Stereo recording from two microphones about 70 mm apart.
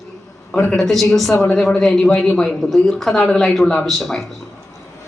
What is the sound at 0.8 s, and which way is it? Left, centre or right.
A man's voice, centre.